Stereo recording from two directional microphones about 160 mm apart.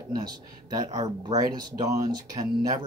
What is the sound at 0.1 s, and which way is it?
Speech, 25° right (ahead or behind).